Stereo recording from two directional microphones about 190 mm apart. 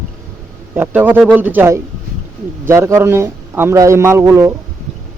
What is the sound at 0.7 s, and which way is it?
A man's voice, 10° right (ahead or behind).